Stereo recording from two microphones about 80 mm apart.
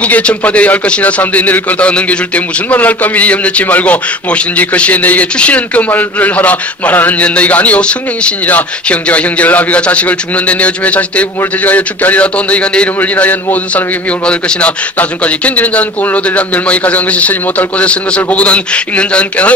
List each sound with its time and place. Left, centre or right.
0.0 s speech: centre